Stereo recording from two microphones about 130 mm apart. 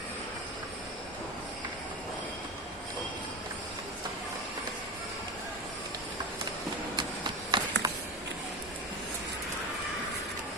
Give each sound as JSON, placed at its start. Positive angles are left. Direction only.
{"t": 6.9, "sound": "run", "side_deg": -35}